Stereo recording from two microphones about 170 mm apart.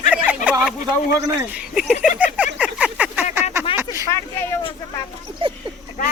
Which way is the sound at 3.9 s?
25° left (ahead or behind).